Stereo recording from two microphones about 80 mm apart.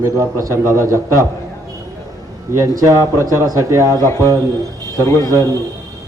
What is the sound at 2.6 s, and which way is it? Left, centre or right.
Speech, right.